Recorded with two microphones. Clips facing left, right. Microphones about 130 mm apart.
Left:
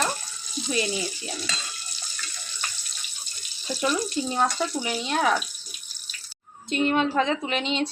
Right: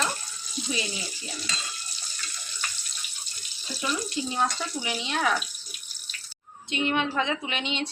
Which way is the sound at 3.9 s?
40° left (ahead or behind).